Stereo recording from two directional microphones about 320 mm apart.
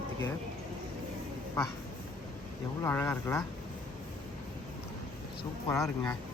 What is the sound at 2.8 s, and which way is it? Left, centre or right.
Speech, centre.